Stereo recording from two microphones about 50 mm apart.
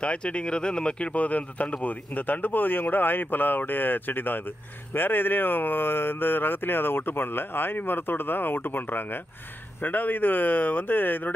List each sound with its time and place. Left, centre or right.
0.0 s speech: left